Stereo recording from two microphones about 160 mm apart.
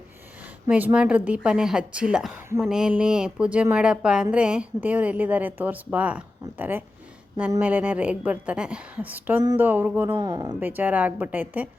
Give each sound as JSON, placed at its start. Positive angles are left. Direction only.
{"t": 0.7, "sound": "a woman's voice", "side_deg": -10}
{"t": 10.2, "sound": "speech", "side_deg": -25}
{"t": 10.6, "sound": "a woman's voice", "side_deg": -10}